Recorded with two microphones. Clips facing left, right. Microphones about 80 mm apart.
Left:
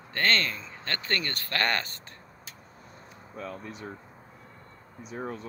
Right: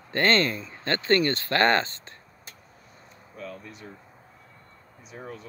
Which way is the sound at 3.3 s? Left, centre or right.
Left.